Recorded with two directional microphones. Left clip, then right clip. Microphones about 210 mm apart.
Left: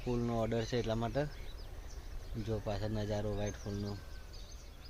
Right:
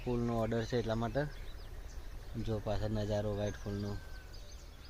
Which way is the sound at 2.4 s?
30° right (ahead or behind).